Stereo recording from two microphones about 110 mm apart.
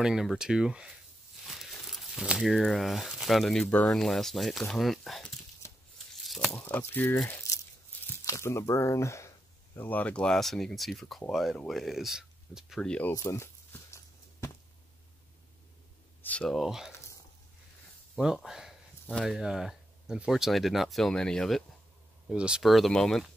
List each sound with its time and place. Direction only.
0.0 s speech: 5° right (ahead or behind)
6.2 s tearing: centre (ahead or behind)
6.5 s speech: 25° left (ahead or behind)
7.2 s a sound: 25° left (ahead or behind)
8.2 s speech: 25° left (ahead or behind)
9.8 s speech: 15° left (ahead or behind); by 12.8 s 5° right (ahead or behind)
12.8 s speech: 10° left (ahead or behind)
13.1 s a sound: 25° left (ahead or behind)
16.2 s speech: 10° left (ahead or behind)
16.5 s speech: 5° right (ahead or behind)
18.1 s a sound: 5° right (ahead or behind)
19.2 s speech: 5° right (ahead or behind)
22.3 s speech: 5° right (ahead or behind)